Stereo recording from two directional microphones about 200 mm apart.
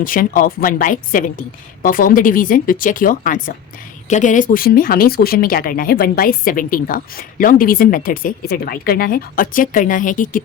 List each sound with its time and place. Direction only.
0.0 s speech: 45° left (ahead or behind)